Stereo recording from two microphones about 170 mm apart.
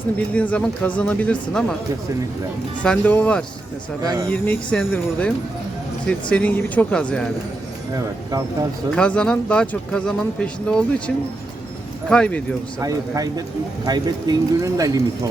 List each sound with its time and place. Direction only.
0.3 s speech: 5° left (ahead or behind)
2.8 s speech: 5° left (ahead or behind)
4.0 s speech: 20° right (ahead or behind)
4.3 s speech: 5° left (ahead or behind)
9.0 s speech: 5° left (ahead or behind)
12.8 s speech: 20° right (ahead or behind)